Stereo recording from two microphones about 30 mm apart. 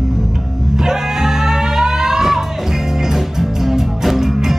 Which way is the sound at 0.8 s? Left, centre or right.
Centre.